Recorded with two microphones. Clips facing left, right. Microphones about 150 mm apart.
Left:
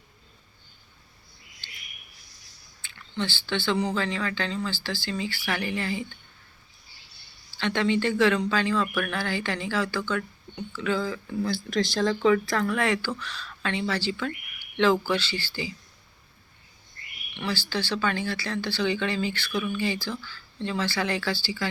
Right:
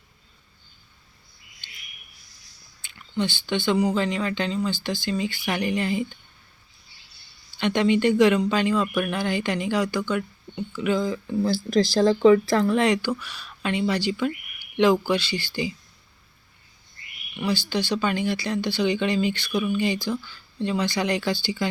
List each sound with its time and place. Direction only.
2.8 s speech: 15° right (ahead or behind)
7.5 s speech: 15° right (ahead or behind)
11.4 s speech: 35° right (ahead or behind); by 15.7 s 15° right (ahead or behind)
17.3 s speech: 15° right (ahead or behind)